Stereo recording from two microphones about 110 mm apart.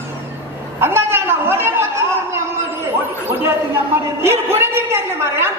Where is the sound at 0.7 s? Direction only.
20° right (ahead or behind).